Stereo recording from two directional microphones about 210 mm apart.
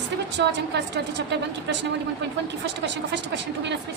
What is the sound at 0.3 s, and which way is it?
A woman's voice, 55° right (ahead or behind).